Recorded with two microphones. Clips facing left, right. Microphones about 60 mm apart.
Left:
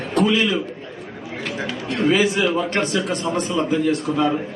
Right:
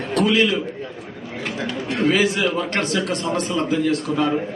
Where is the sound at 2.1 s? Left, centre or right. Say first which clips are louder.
Left 2 dB; centre.